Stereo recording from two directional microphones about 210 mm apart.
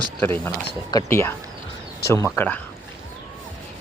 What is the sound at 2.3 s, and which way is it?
Speech, 5° left (ahead or behind).